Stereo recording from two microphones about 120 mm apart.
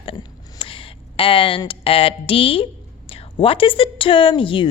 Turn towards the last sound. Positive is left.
turn(degrees=45)  # may be behind; listen again after turning